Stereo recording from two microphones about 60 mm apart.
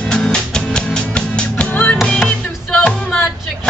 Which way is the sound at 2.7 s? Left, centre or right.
Centre.